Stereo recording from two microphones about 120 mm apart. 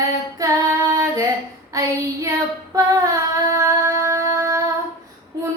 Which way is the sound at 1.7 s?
25° right (ahead or behind).